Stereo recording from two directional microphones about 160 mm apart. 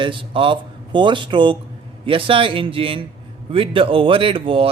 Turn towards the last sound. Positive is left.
turn(degrees=-35)  # may be behind; listen again after turning